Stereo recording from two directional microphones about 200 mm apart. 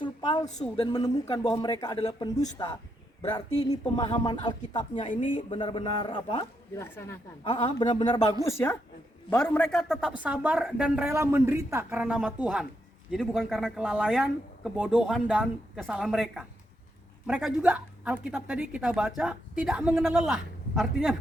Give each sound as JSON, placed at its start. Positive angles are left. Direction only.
{"t": 0.0, "sound": "a sound", "side_deg": 20}
{"t": 0.8, "sound": "speech", "side_deg": 20}
{"t": 6.9, "sound": "a woman's voice", "side_deg": 10}
{"t": 7.4, "sound": "a woman's voice", "side_deg": 25}